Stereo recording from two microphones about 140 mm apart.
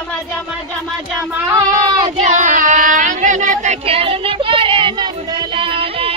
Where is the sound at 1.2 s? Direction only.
20° right (ahead or behind).